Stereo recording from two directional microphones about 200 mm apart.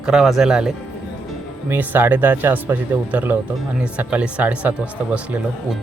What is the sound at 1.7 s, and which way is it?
Speech, 10° right (ahead or behind).